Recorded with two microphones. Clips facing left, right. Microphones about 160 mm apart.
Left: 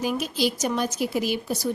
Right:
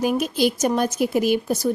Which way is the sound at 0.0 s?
50° right (ahead or behind).